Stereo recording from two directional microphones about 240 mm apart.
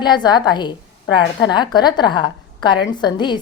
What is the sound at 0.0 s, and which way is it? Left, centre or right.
A woman's voice, centre.